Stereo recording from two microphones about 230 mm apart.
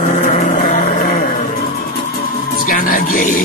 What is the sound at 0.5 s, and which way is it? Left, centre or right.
Vehicle, left.